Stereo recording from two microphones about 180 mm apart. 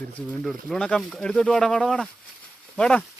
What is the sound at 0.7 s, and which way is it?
Speech, 5° left (ahead or behind).